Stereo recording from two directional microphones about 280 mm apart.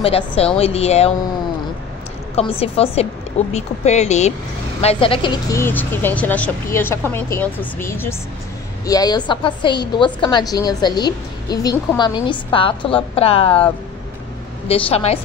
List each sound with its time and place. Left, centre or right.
0.0 s speech: left
2.6 s a woman's voice: left
14.7 s speech: left